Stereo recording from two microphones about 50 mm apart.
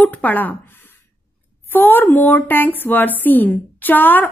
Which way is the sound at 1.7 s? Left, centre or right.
Left.